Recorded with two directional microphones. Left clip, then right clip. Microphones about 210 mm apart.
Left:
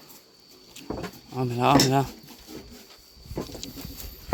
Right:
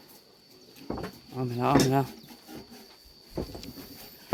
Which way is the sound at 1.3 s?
20° left (ahead or behind).